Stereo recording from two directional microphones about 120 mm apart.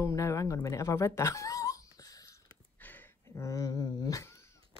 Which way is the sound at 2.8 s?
15° left (ahead or behind).